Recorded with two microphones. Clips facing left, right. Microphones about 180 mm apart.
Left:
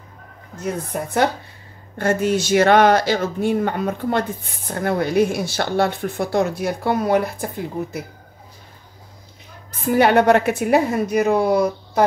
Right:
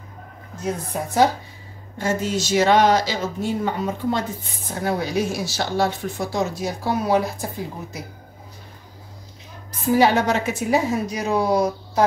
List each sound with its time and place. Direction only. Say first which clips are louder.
0.8 s speech: right 1 dB; 60° left (ahead or behind)
9.9 s speech: left 4 dB; 60° left (ahead or behind)